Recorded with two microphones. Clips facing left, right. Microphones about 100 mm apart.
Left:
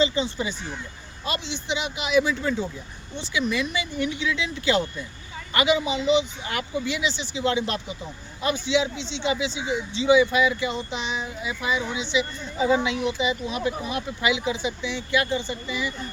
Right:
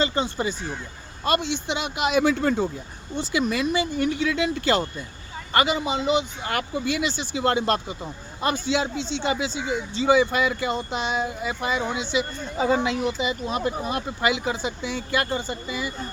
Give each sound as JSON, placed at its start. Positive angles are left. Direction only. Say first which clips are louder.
{"t": 0.0, "sound": "a man's voice", "louder": "even", "side_deg": -50}